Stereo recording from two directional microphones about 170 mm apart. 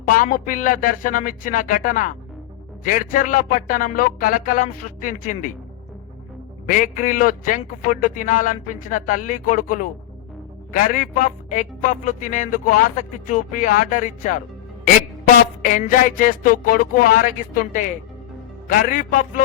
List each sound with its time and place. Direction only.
0.1 s a man's voice: 55° left (ahead or behind)
6.7 s a man's voice: 50° left (ahead or behind)
15.6 s a man's voice: 50° left (ahead or behind)